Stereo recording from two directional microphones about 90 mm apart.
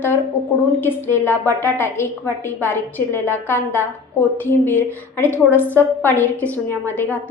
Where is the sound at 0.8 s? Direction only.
25° left (ahead or behind).